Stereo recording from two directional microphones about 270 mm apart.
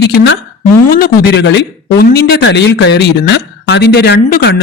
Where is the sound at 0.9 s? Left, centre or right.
Left.